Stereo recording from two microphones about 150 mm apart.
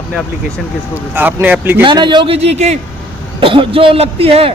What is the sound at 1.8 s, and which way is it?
Speech, 30° right (ahead or behind).